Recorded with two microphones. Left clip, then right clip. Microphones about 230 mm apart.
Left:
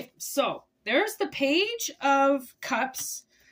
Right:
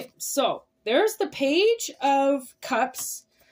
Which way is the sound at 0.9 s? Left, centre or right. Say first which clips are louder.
Right 3 dB; centre.